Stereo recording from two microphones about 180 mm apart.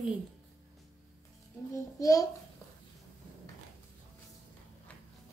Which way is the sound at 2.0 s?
20° left (ahead or behind).